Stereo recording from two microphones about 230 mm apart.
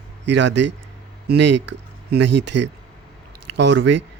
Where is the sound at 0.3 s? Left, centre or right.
Right.